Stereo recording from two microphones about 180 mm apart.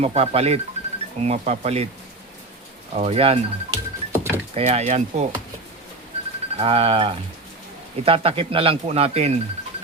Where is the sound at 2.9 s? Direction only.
35° right (ahead or behind).